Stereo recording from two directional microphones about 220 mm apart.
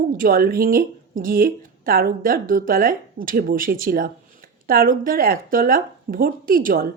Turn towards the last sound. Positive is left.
turn(degrees=-40)  # may be behind; listen again after turning